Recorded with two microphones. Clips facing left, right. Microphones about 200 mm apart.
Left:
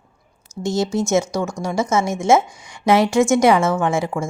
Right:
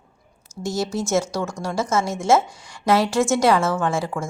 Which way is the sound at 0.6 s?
20° left (ahead or behind).